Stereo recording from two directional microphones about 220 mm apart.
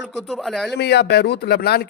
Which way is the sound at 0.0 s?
Centre (ahead or behind).